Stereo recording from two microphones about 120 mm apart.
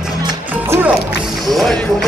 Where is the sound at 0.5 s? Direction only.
15° right (ahead or behind).